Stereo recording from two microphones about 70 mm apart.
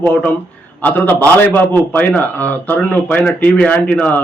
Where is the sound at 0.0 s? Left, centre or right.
Centre.